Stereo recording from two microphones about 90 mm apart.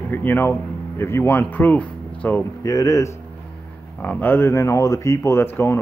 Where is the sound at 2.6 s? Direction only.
40° left (ahead or behind).